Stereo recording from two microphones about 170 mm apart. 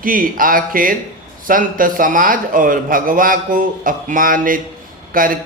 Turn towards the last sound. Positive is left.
turn(degrees=-55)  # may be behind; listen again after turning